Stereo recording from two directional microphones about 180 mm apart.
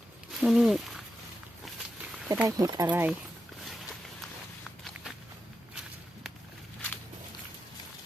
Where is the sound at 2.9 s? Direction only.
10° right (ahead or behind).